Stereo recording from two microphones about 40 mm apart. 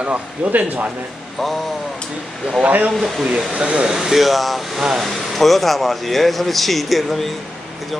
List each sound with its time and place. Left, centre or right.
0.0 s speech: right
2.6 s speech: right
2.9 s speech: centre
3.5 s speech: right
3.8 s speech: centre
4.7 s speech: centre
5.0 s speech: centre